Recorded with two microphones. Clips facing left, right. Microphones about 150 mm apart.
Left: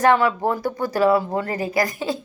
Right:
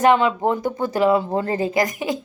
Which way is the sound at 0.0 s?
20° right (ahead or behind).